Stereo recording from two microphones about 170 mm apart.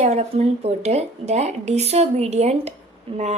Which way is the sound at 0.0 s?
40° right (ahead or behind).